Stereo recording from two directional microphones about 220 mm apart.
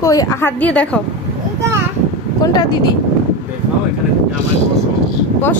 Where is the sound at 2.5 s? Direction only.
20° left (ahead or behind).